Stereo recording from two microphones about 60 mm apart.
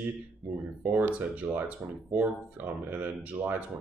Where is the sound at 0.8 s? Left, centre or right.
Right.